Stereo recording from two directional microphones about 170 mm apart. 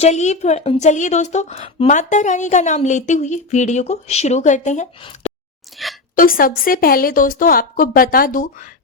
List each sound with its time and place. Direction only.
0.0 s a woman's voice: 40° left (ahead or behind)
4.9 s speech: 30° left (ahead or behind)
5.7 s a woman's voice: centre (ahead or behind)
6.1 s a woman's voice: 55° left (ahead or behind)